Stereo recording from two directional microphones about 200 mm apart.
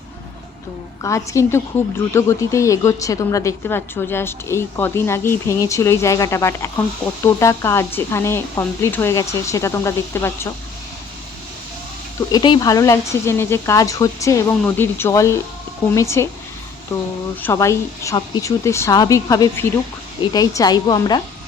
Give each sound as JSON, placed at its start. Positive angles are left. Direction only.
{"t": 1.0, "sound": "a woman's voice", "side_deg": 15}
{"t": 12.3, "sound": "a woman's voice", "side_deg": 20}
{"t": 17.4, "sound": "a woman's voice", "side_deg": 15}